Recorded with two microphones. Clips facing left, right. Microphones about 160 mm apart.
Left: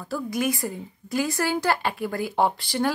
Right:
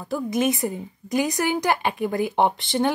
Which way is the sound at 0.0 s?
20° right (ahead or behind).